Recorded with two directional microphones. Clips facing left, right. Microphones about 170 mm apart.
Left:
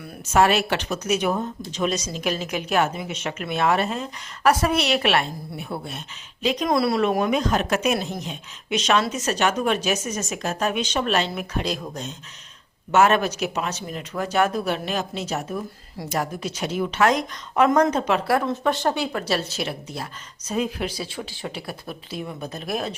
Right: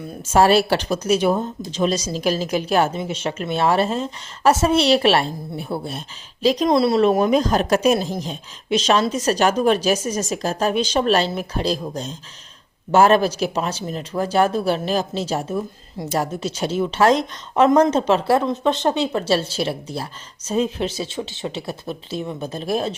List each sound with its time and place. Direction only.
0.0 s speech: 30° right (ahead or behind)
6.7 s speech: 25° right (ahead or behind)